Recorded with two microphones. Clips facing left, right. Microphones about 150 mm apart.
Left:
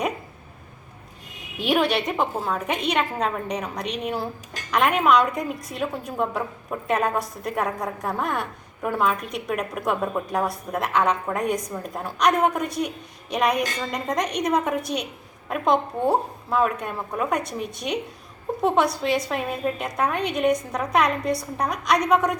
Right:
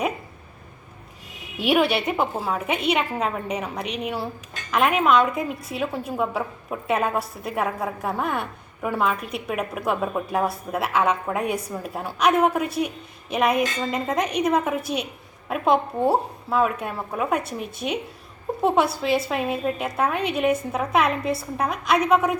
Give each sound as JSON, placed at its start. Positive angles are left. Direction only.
{"t": 1.5, "sound": "a woman's voice", "side_deg": -5}